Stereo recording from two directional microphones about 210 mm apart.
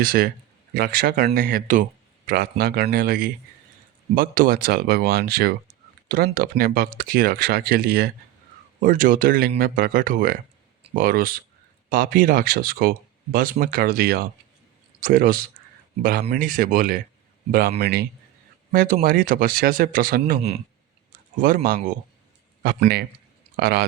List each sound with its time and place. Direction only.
0.0 s speech: 45° right (ahead or behind)
23.6 s speech: 45° right (ahead or behind)